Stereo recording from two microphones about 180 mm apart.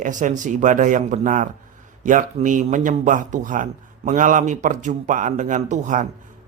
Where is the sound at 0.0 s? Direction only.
45° right (ahead or behind).